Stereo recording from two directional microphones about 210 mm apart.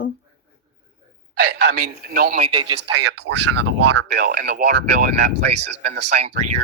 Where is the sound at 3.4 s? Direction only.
90° right.